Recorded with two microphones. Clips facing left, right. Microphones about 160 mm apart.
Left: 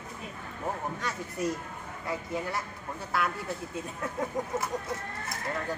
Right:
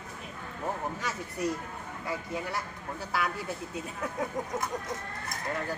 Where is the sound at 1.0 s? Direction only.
Centre (ahead or behind).